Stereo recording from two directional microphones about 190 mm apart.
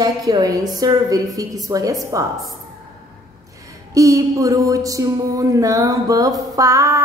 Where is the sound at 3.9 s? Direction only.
15° right (ahead or behind).